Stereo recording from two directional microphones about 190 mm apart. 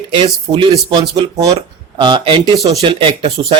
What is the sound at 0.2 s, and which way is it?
Speech, 25° right (ahead or behind).